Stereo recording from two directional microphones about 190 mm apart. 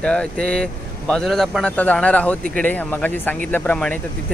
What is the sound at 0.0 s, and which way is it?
Speech, 5° left (ahead or behind).